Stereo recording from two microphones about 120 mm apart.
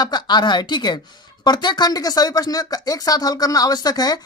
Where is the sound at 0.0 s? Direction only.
35° left (ahead or behind).